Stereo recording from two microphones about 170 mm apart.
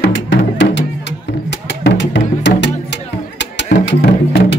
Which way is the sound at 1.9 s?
90° left.